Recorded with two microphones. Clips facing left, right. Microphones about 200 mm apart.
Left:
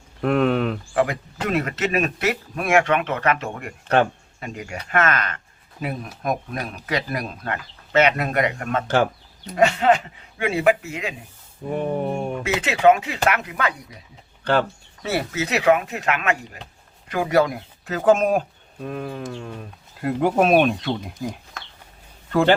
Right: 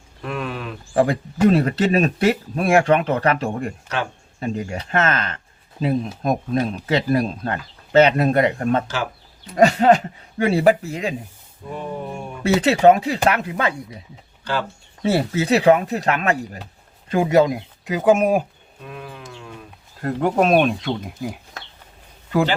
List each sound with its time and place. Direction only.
0.2 s speech: 55° left (ahead or behind)
0.9 s speech: 30° right (ahead or behind)
11.7 s a sound: 55° left (ahead or behind)
12.4 s speech: 35° right (ahead or behind)
14.5 s a sound: 55° left (ahead or behind)
15.0 s speech: 30° right (ahead or behind)
17.1 s speech: 25° right (ahead or behind)
18.8 s speech: 40° left (ahead or behind)
20.0 s speech: 5° left (ahead or behind)